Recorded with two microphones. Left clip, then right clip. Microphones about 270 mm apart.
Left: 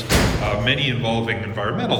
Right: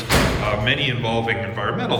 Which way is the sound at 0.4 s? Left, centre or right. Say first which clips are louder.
Even; centre.